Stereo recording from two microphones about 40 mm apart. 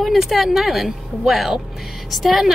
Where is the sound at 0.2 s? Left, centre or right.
Centre.